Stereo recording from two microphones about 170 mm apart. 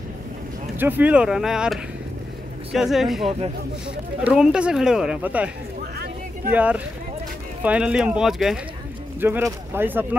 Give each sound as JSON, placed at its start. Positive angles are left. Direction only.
{"t": 0.7, "sound": "speech", "side_deg": -10}
{"t": 3.3, "sound": "a man's voice", "side_deg": -35}
{"t": 4.2, "sound": "speech", "side_deg": -5}
{"t": 6.5, "sound": "speech", "side_deg": -5}
{"t": 9.2, "sound": "speech", "side_deg": -15}